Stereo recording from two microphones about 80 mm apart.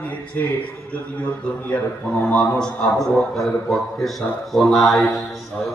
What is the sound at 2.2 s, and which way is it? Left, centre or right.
Speech, centre.